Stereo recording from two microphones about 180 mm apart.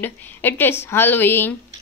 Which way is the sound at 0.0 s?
10° left (ahead or behind).